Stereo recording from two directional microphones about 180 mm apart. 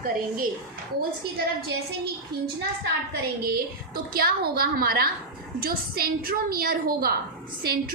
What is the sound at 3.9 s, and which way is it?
A woman's voice, 55° right (ahead or behind).